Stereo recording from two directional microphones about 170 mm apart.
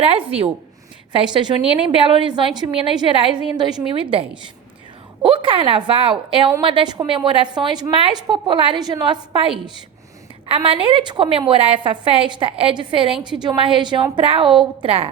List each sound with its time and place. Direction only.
0.0 s a woman's voice: 35° right (ahead or behind)
10.5 s a woman's voice: 30° right (ahead or behind)